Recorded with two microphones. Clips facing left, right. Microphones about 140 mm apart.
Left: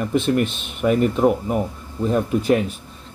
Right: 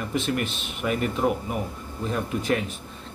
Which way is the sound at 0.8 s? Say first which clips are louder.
Left 8 dB; 45° left (ahead or behind).